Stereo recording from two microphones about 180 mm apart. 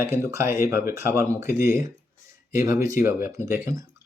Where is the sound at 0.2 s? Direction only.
15° right (ahead or behind).